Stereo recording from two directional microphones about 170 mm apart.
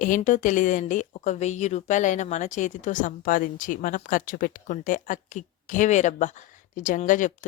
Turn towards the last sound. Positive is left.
turn(degrees=50)  # may be behind; listen again after turning